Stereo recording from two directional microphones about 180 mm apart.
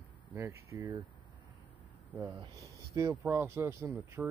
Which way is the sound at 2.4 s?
15° right (ahead or behind).